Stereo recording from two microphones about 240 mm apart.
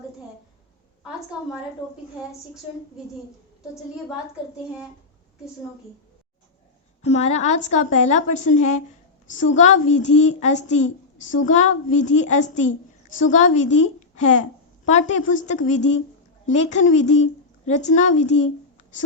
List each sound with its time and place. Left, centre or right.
1.0 s a woman's voice: centre
4.5 s a woman's voice: centre
7.0 s a woman's voice: left